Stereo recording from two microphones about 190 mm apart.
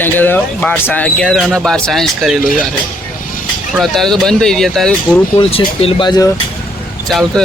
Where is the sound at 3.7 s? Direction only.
Centre (ahead or behind).